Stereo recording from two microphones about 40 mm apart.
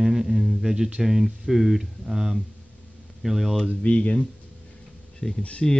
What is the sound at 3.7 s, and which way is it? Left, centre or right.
Speech, left.